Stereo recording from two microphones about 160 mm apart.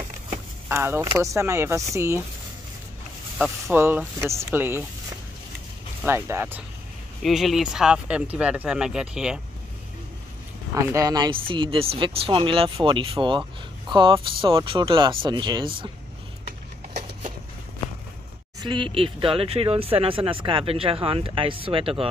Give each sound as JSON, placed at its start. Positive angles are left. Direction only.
{"t": 0.7, "sound": "speech", "side_deg": -15}
{"t": 3.6, "sound": "speech", "side_deg": -15}
{"t": 6.0, "sound": "speech", "side_deg": -15}
{"t": 7.2, "sound": "speech", "side_deg": 0}
{"t": 10.7, "sound": "speech", "side_deg": -20}
{"t": 18.6, "sound": "speech", "side_deg": -30}